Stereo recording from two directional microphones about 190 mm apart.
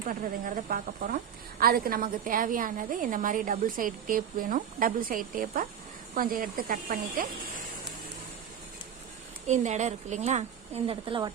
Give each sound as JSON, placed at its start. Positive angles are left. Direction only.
{"t": 0.1, "sound": "a woman's voice", "side_deg": -45}
{"t": 9.5, "sound": "a woman's voice", "side_deg": -40}